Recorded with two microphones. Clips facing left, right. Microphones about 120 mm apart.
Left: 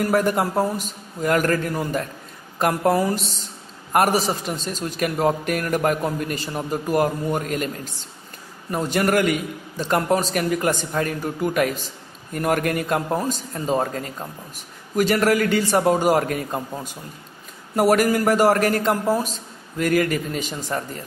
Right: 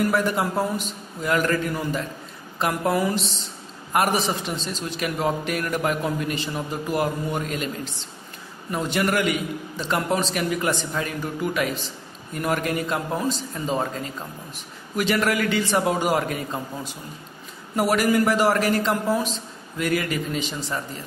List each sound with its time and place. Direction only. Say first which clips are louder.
0.0 s a man's voice: left 2 dB; 45° left (ahead or behind)
17.7 s a man's voice: left 3 dB; 45° left (ahead or behind)